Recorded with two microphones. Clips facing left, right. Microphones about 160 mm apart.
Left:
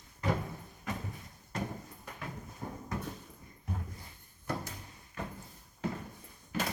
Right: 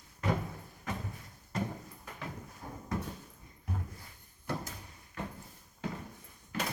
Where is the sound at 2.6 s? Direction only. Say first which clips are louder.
Left 5 dB; 60° left (ahead or behind).